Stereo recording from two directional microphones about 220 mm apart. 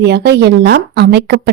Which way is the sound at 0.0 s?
50° right (ahead or behind).